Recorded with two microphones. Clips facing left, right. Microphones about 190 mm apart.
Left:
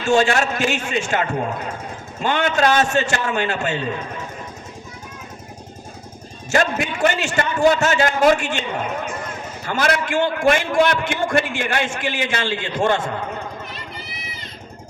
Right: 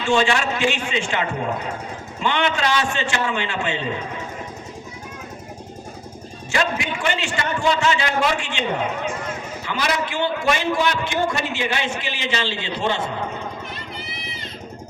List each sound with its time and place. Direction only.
0.0 s a man's voice: 45° left (ahead or behind)
2.2 s a man's voice: 45° left (ahead or behind)
6.5 s a man's voice: 45° left (ahead or behind)
9.6 s a man's voice: 55° left (ahead or behind)